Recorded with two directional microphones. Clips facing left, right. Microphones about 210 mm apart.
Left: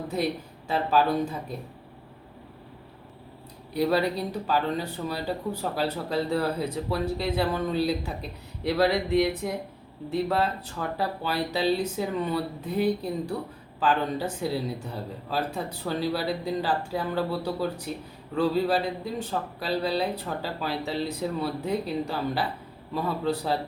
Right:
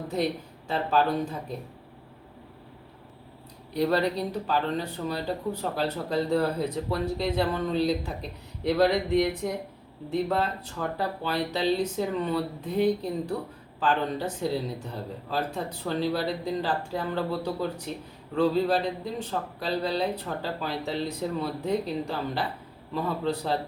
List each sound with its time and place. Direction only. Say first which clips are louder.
0.7 s speech: left 1 dB; 5° left (ahead or behind)
3.8 s speech: even; 5° left (ahead or behind)